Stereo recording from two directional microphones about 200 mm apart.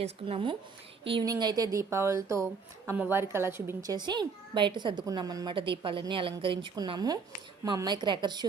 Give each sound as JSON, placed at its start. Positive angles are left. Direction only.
{"t": 0.0, "sound": "a woman's voice", "side_deg": -30}